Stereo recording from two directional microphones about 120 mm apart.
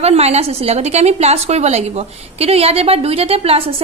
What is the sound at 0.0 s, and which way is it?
A woman's voice, 60° right (ahead or behind).